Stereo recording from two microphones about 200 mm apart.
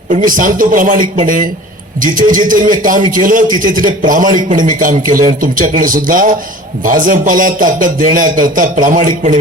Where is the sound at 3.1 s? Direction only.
45° right (ahead or behind).